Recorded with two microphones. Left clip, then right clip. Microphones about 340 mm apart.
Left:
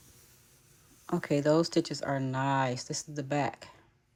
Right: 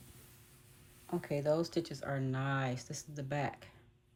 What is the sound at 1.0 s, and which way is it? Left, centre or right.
Speech, left.